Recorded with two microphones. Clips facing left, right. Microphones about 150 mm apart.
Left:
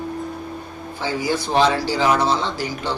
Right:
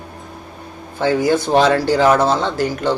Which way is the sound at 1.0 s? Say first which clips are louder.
Right 7 dB; 50° right (ahead or behind).